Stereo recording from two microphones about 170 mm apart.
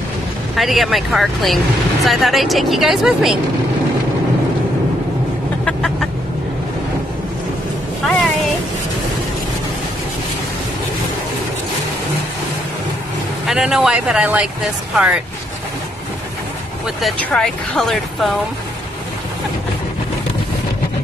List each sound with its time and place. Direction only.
0.6 s speech: centre (ahead or behind)
5.7 s chicken: 5° left (ahead or behind)
13.5 s speech: 5° right (ahead or behind)
17.0 s speech: 5° left (ahead or behind)